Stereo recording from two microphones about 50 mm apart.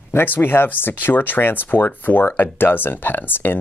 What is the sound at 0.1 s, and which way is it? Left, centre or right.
Speech, left.